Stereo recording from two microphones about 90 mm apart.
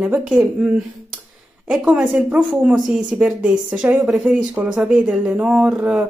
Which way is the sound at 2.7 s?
5° right (ahead or behind).